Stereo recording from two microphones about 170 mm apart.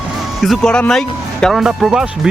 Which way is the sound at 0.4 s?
Centre (ahead or behind).